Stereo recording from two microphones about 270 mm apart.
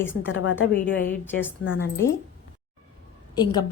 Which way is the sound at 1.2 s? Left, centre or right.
Centre.